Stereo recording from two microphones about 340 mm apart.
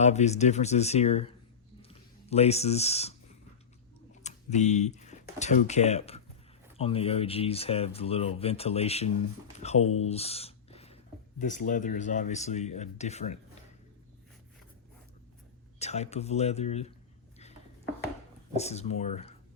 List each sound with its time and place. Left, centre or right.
0.0 s speech: centre
4.2 s speech: centre
10.0 s a sound: centre
11.3 s speech: left
15.8 s speech: centre
18.5 s speech: centre